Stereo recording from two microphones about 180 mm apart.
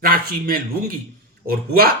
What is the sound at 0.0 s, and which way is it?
Speech, 55° right (ahead or behind).